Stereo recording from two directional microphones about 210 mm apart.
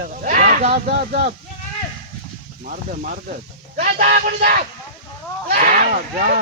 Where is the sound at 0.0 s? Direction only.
40° right (ahead or behind).